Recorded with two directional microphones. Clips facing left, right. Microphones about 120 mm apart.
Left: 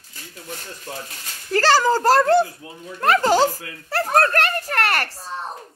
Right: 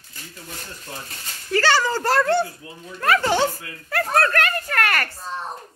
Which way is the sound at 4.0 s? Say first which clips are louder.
Left 2 dB; 30° left (ahead or behind).